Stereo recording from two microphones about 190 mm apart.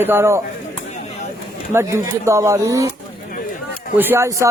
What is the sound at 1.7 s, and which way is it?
Speech, 15° right (ahead or behind).